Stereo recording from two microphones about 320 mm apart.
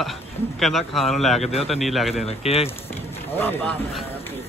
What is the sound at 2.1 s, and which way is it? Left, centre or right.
Speech, centre.